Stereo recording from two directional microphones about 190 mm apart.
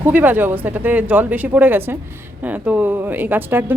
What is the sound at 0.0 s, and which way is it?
Speech, 10° right (ahead or behind).